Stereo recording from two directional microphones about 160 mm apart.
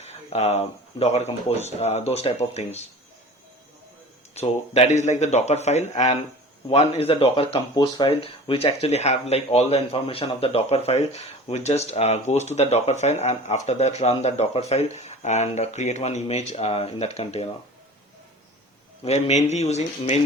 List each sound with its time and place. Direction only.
0.0 s speech: 45° left (ahead or behind)
4.4 s speech: 40° left (ahead or behind)
19.0 s speech: 45° left (ahead or behind)